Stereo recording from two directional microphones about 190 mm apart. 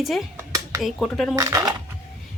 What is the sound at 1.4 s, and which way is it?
Speech, 20° right (ahead or behind).